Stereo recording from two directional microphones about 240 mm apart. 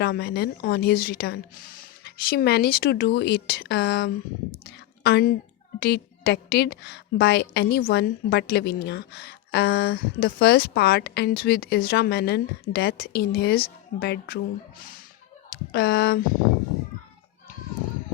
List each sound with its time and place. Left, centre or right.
0.0 s a woman's voice: left